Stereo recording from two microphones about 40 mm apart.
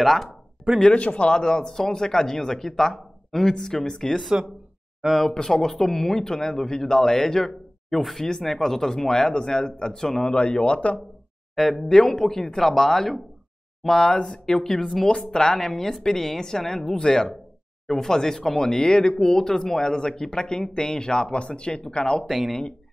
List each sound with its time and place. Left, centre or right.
0.0 s speech: centre
0.9 s speech: left; by 4.2 s centre
5.2 s speech: centre
10.3 s speech: left
11.5 s speech: centre; by 22.2 s left
22.2 s speech: centre